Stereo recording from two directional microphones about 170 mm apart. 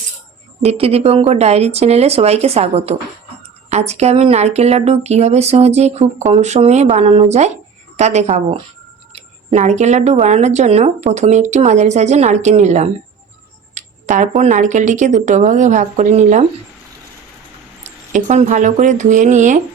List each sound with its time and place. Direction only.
0.6 s speech: 35° right (ahead or behind)
17.8 s speech: 45° right (ahead or behind)